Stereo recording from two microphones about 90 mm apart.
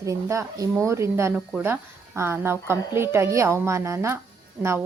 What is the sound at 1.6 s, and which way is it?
A woman's voice, 20° right (ahead or behind).